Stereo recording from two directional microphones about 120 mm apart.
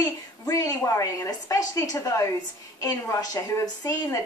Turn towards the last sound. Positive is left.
turn(degrees=25)  # may be behind; listen again after turning